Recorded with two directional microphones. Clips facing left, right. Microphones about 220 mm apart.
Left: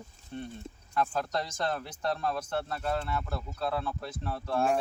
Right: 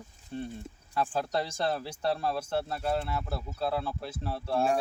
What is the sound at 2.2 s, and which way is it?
Speech, 10° right (ahead or behind).